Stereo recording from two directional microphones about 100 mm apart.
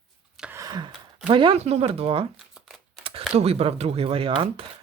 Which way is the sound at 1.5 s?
85° right.